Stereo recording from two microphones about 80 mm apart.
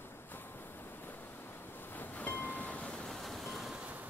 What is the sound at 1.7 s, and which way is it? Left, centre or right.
Vehicle, left.